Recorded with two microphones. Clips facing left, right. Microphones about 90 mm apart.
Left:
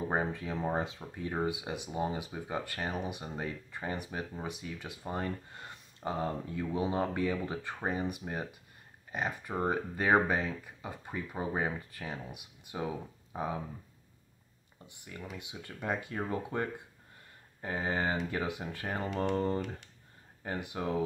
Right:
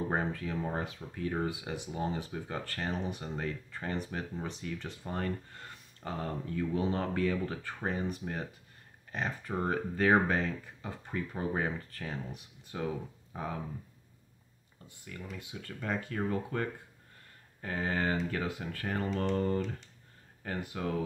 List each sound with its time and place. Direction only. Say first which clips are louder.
0.1 s speech: even; 15° left (ahead or behind)
14.9 s speech: even; 20° left (ahead or behind)